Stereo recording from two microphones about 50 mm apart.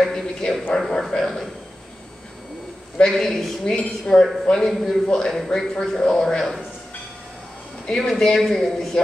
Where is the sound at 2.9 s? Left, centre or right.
Centre.